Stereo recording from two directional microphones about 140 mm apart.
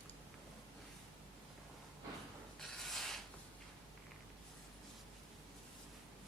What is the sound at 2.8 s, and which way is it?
Rub, centre (ahead or behind).